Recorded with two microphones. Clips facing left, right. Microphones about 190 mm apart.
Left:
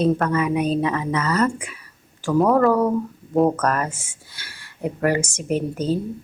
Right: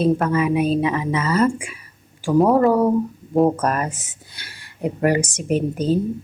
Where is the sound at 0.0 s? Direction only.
10° right (ahead or behind).